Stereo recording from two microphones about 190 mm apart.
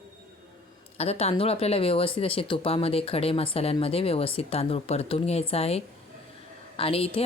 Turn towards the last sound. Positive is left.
turn(degrees=30)  # may be behind; listen again after turning